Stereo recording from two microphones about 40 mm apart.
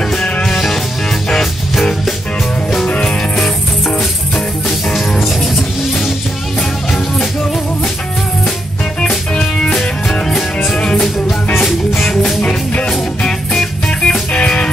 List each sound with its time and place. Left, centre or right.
0.1 s music: centre
2.9 s music: left
4.6 s music: centre
9.3 s music: centre
9.7 s music: centre
10.7 s music: centre
14.3 s music: left